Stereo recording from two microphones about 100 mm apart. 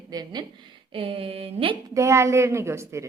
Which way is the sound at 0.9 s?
65° right (ahead or behind).